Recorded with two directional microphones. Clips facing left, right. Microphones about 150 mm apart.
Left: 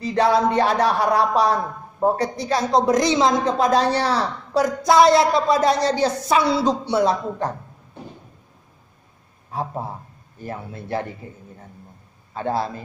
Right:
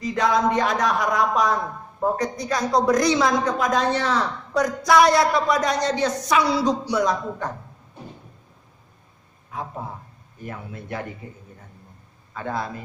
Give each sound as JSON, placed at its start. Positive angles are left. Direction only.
{"t": 0.0, "sound": "speech", "side_deg": 35}
{"t": 9.5, "sound": "a man's voice", "side_deg": 35}
{"t": 12.4, "sound": "speech", "side_deg": 30}